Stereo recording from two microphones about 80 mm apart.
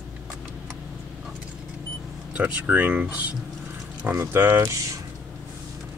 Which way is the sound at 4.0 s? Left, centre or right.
Right.